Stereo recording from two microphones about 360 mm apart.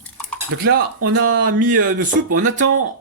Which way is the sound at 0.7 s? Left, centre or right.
Right.